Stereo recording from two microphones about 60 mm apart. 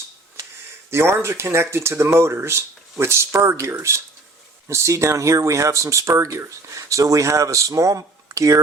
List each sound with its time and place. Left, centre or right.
0.9 s speech: right